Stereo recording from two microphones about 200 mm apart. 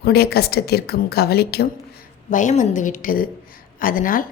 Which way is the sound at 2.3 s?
40° left (ahead or behind).